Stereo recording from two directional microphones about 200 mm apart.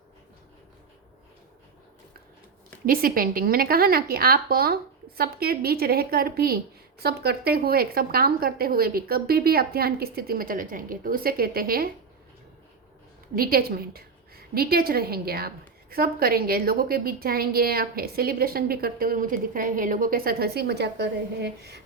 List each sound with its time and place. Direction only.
2.8 s a woman's voice: 45° right (ahead or behind)
13.3 s a woman's voice: 45° right (ahead or behind)